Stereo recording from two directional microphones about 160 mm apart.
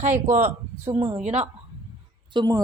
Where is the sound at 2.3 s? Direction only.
25° right (ahead or behind).